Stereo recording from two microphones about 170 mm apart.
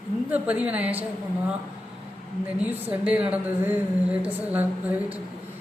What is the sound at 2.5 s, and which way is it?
A woman's voice, 10° right (ahead or behind).